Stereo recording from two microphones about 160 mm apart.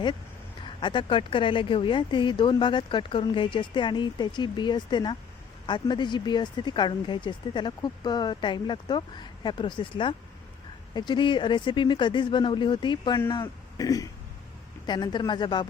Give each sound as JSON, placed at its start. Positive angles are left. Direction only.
{"t": 0.6, "sound": "speech", "side_deg": 30}